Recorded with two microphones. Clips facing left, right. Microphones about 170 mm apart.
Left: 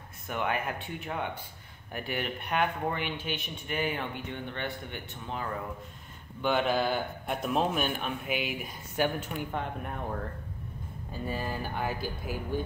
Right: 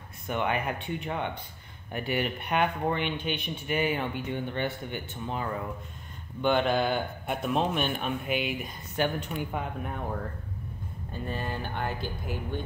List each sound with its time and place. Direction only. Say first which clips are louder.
0.3 s speech: right 2 dB; centre (ahead or behind)
11.1 s speech: even; 5° left (ahead or behind)